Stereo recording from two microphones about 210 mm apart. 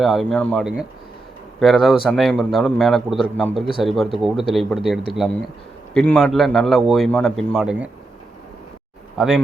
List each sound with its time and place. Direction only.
0.0 s a man's voice: centre (ahead or behind)
9.1 s speech: 5° right (ahead or behind)